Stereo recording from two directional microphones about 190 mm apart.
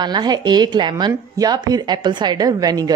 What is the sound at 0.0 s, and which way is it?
A woman's voice, 20° right (ahead or behind).